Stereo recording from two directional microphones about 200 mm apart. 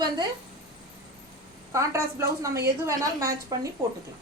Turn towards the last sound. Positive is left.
turn(degrees=-15)  # may be behind; listen again after turning